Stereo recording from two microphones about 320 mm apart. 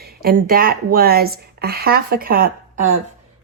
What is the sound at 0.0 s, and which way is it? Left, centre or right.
Speech, right.